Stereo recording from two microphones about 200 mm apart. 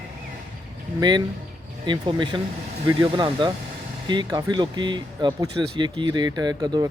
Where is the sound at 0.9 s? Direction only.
20° right (ahead or behind).